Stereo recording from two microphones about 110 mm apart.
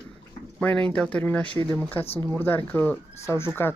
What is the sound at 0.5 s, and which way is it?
Speech, 10° left (ahead or behind).